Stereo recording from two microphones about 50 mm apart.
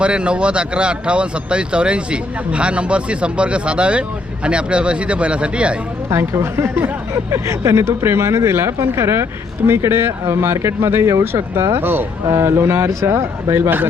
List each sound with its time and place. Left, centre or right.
0.0 s speech: right
6.1 s speech: right
7.3 s speech: right
9.6 s speech: right
12.3 s speech: right
13.6 s speech: right